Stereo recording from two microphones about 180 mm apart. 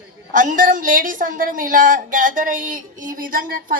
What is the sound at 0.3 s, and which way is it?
A woman's voice, 50° right (ahead or behind).